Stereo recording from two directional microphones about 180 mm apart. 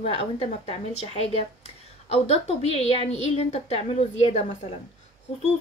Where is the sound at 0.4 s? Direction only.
35° left (ahead or behind).